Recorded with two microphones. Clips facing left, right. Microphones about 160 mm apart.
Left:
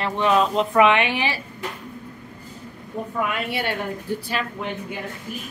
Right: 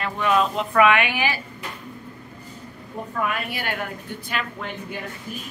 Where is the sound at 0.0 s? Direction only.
30° left (ahead or behind).